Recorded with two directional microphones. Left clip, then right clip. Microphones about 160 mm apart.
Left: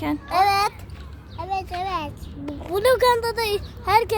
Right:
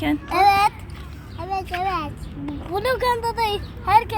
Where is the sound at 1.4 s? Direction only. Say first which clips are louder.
Right 2 dB; 50° left (ahead or behind); by 4.2 s 80° left.